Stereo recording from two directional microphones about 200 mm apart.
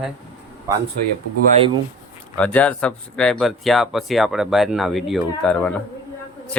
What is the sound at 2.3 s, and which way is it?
Speech, 5° left (ahead or behind).